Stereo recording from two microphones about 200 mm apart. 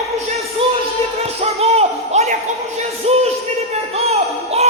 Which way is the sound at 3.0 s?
30° right (ahead or behind).